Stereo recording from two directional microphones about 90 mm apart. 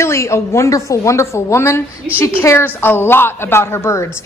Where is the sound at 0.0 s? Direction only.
30° left (ahead or behind).